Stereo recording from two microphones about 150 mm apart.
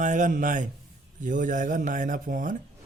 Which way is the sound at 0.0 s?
55° right (ahead or behind).